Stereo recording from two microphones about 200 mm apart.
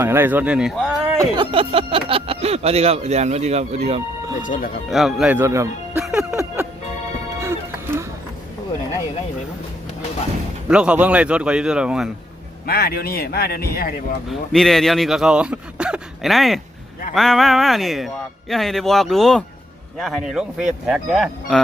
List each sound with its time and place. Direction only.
0.0 s speech: 10° right (ahead or behind)
1.1 s speech: 15° right (ahead or behind)
1.5 s speech: 25° right (ahead or behind)
4.4 s speech: 40° left (ahead or behind)
4.9 s speech: centre (ahead or behind)
6.1 s a sound: 15° right (ahead or behind)
7.3 s music: 15° right (ahead or behind)
10.7 s speech: 5° right (ahead or behind)
12.6 s speech: 50° left (ahead or behind)
14.3 s speech: centre (ahead or behind)